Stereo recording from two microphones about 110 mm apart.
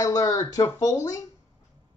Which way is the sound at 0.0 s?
35° left (ahead or behind).